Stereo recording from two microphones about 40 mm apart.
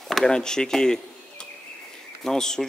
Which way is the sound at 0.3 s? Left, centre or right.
Centre.